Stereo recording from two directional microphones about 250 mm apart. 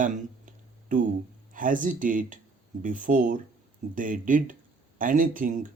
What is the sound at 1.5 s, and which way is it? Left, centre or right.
Speech, right.